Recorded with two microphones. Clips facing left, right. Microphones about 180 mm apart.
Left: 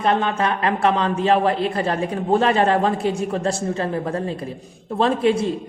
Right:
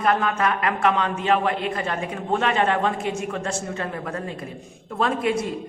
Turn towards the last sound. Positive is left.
turn(degrees=30)  # may be behind; listen again after turning